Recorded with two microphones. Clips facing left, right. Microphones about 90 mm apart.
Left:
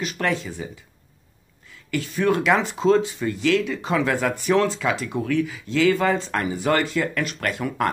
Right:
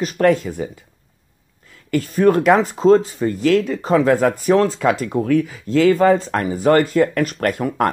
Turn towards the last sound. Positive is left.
turn(degrees=-45)  # may be behind; listen again after turning